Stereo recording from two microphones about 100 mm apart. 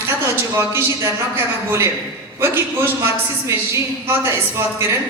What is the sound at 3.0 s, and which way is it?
Speech, 30° right (ahead or behind).